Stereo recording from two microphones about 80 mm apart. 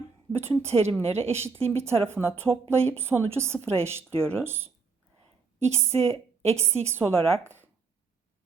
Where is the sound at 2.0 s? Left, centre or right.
Right.